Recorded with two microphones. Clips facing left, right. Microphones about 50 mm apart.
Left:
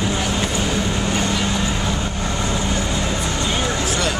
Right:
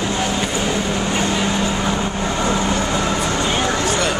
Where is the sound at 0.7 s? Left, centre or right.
Centre; by 3.6 s right.